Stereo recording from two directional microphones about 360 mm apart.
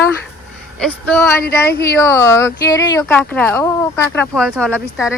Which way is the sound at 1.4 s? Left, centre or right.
Left.